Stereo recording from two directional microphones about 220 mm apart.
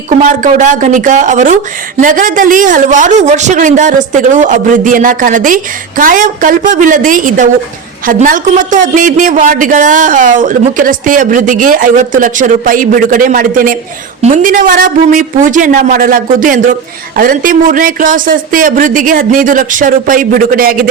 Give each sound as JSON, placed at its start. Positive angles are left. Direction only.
{"t": 0.2, "sound": "a man's voice", "side_deg": -35}